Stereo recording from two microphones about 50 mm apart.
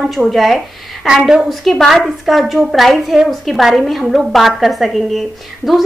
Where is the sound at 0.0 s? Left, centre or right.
Centre.